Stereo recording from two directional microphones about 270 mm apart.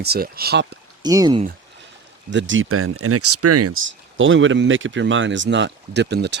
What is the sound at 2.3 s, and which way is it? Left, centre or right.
Speech, right.